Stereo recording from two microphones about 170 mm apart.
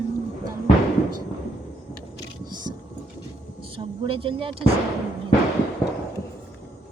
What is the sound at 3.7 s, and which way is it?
Speech, 30° right (ahead or behind).